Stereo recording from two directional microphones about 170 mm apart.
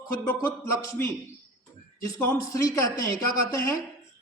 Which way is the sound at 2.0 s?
20° left (ahead or behind).